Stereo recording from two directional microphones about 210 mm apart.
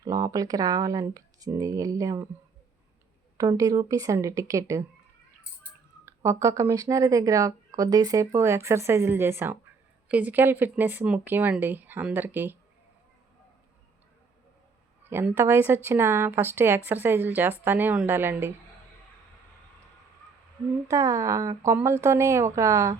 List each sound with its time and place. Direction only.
0.0 s speech: 15° right (ahead or behind)
3.3 s speech: 15° right (ahead or behind)
6.1 s speech: 15° right (ahead or behind)
15.1 s speech: 10° right (ahead or behind)
20.8 s speech: 15° right (ahead or behind)